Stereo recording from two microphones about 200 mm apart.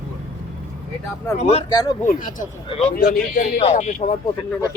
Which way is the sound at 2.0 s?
40° left (ahead or behind).